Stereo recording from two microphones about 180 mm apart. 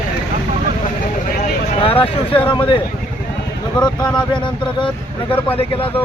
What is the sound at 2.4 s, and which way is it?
Speech, 30° left (ahead or behind).